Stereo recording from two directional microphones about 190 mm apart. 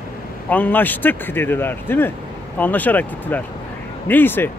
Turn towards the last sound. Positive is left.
turn(degrees=10)  # may be behind; listen again after turning